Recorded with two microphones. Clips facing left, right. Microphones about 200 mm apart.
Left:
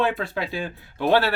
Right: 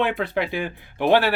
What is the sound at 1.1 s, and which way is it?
Speech, 10° right (ahead or behind).